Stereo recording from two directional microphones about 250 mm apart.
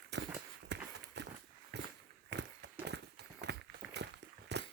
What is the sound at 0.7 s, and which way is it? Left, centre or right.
Clip-clop, right.